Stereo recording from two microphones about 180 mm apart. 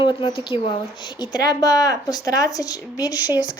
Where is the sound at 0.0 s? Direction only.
30° left (ahead or behind).